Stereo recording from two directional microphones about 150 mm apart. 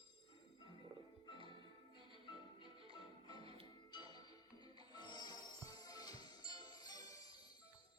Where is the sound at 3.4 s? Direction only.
40° right (ahead or behind).